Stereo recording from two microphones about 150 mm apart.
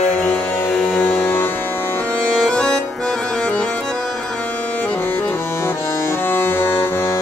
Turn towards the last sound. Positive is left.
turn(degrees=15)  # may be behind; listen again after turning